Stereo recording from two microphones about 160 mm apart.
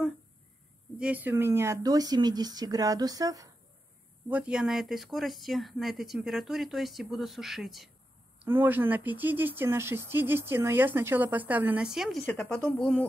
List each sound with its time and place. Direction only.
0.9 s speech: 10° right (ahead or behind)
4.3 s speech: 5° right (ahead or behind)
8.5 s a woman's voice: 10° right (ahead or behind); by 13.0 s 5° left (ahead or behind)